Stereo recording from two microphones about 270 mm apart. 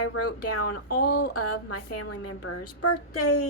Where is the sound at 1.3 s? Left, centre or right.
Left.